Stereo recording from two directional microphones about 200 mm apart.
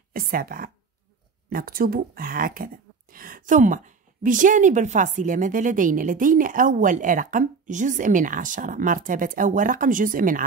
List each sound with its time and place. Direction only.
0.1 s speech: 45° right (ahead or behind)